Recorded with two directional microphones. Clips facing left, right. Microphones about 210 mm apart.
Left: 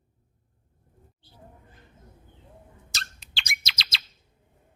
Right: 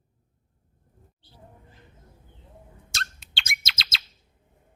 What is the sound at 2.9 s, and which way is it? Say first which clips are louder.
Bird: right 4 dB; centre (ahead or behind).